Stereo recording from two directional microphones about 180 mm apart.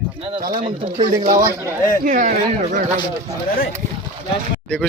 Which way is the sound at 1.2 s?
50° right (ahead or behind).